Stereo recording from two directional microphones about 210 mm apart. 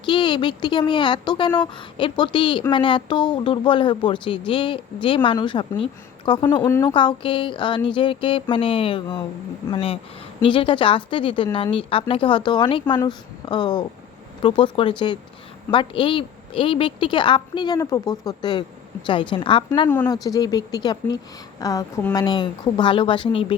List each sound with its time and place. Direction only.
0.0 s a woman's voice: 25° left (ahead or behind)